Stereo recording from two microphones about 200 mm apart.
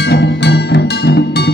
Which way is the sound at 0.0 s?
55° left (ahead or behind).